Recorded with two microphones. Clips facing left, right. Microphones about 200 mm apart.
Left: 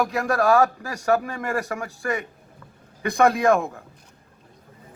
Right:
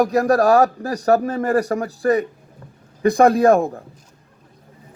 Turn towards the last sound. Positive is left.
turn(degrees=-35)  # may be behind; listen again after turning